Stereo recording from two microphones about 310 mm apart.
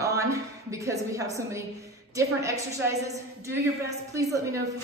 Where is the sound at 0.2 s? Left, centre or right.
Centre.